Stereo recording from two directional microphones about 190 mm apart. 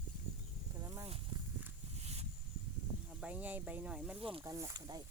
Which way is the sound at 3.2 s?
10° right (ahead or behind).